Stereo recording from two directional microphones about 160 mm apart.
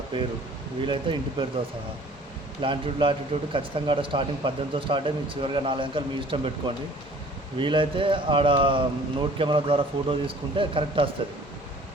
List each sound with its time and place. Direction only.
0.1 s speech: 30° right (ahead or behind)
2.6 s speech: 30° right (ahead or behind)